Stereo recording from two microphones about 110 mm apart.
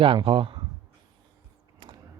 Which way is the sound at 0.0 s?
50° right (ahead or behind).